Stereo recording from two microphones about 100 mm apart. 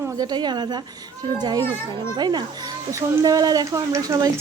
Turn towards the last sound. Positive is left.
turn(degrees=-35)  # may be behind; listen again after turning